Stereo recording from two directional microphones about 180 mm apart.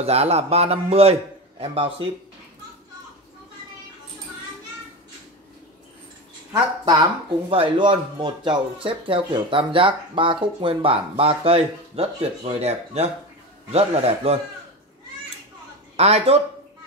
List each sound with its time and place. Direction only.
0.0 s speech: 35° right (ahead or behind)
6.8 s speech: 25° right (ahead or behind)
16.0 s speech: 35° right (ahead or behind)